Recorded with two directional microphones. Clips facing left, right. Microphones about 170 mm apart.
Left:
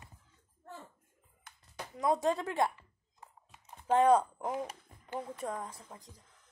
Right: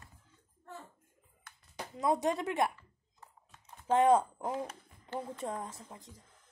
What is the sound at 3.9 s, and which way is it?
Speech, 25° right (ahead or behind).